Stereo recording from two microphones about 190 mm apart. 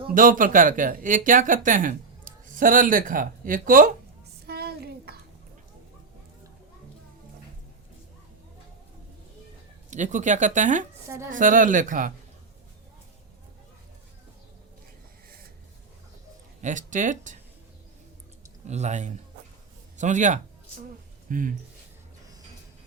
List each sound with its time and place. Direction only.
0.1 s speech: 45° right (ahead or behind)
4.4 s a sound: 55° right (ahead or behind)
9.9 s speech: 40° right (ahead or behind)
16.6 s speech: 40° right (ahead or behind)
18.6 s speech: 35° right (ahead or behind)